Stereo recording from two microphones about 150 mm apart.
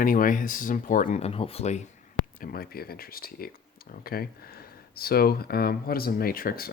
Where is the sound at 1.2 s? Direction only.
40° left (ahead or behind).